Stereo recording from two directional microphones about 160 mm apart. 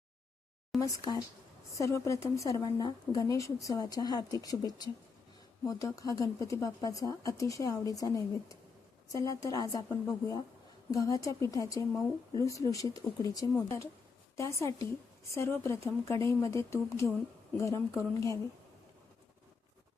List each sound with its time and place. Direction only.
0.8 s a woman's voice: 20° left (ahead or behind)